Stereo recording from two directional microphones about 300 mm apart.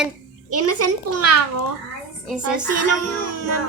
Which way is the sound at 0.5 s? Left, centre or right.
Right.